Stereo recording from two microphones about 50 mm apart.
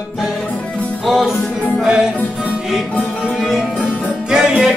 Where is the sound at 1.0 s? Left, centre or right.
Centre.